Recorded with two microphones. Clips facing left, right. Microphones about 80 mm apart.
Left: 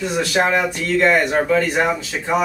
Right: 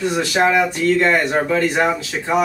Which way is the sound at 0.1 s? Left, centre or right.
Centre.